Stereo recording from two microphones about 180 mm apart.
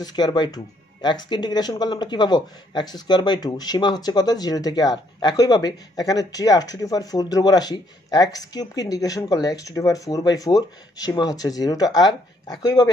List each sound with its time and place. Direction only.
0.0 s speech: 25° left (ahead or behind)